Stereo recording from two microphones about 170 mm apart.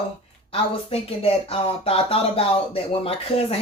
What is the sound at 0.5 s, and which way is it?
Speech, 35° left (ahead or behind).